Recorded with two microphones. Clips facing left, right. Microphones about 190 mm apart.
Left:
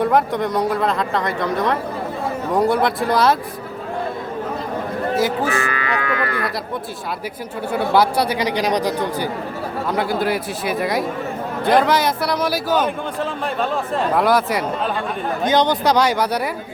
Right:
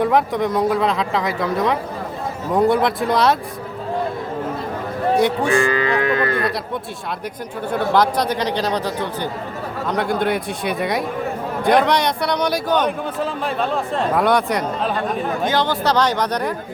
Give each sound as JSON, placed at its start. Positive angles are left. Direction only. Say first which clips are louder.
{"t": 0.0, "sound": "a man's voice", "louder": "even", "side_deg": 0}
{"t": 5.1, "sound": "a man's voice", "louder": "right 2 dB", "side_deg": 0}
{"t": 5.6, "sound": "moo", "louder": "right 5 dB", "side_deg": -30}
{"t": 7.7, "sound": "a man's voice", "louder": "even", "side_deg": 10}
{"t": 15.4, "sound": "speech", "louder": "left 4 dB", "side_deg": 20}